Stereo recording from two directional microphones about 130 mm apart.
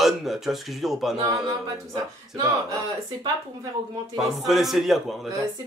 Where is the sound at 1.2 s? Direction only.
25° right (ahead or behind).